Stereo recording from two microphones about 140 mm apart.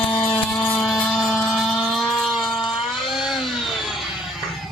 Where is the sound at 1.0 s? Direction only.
5° left (ahead or behind).